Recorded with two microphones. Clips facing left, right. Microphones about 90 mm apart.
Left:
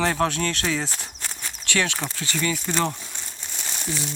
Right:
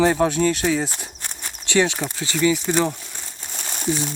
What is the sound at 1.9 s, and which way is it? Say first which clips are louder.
Speech: right 4 dB; 15° right (ahead or behind).